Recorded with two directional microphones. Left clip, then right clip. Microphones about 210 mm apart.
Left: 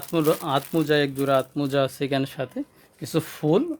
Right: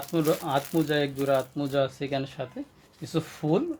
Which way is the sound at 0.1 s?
50° left (ahead or behind).